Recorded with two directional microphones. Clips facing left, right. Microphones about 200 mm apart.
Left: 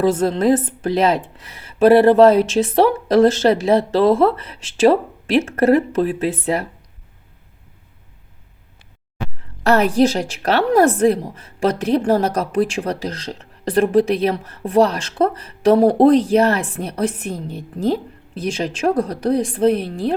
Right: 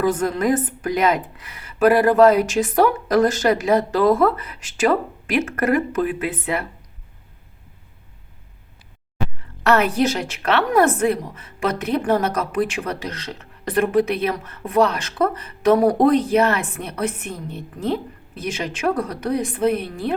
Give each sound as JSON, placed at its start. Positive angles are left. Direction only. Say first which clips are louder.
{"t": 0.0, "sound": "a woman's voice", "louder": "left 4 dB", "side_deg": 30}
{"t": 9.6, "sound": "a woman's voice", "louder": "left 3 dB", "side_deg": 30}